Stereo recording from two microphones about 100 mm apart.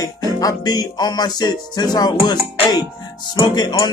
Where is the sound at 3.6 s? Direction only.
50° left (ahead or behind).